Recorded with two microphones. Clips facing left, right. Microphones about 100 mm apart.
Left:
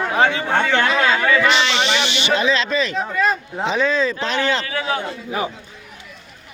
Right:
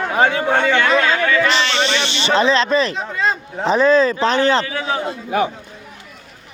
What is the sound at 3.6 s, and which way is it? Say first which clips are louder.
Speech: right 6 dB; 40° right (ahead or behind).